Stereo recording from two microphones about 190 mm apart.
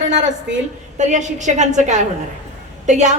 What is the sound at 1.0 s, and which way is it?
A woman's voice, 40° right (ahead or behind).